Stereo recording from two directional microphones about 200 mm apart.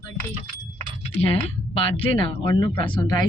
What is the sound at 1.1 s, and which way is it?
Speech, 30° left (ahead or behind).